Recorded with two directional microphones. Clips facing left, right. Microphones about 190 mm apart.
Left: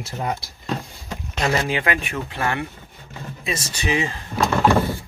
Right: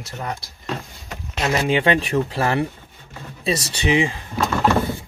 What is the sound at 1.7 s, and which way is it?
Speech, 30° right (ahead or behind).